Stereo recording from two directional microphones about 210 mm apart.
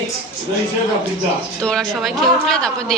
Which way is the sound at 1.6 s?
5° left (ahead or behind).